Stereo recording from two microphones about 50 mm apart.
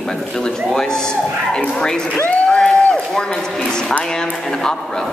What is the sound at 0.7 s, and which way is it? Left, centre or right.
A man's voice, centre.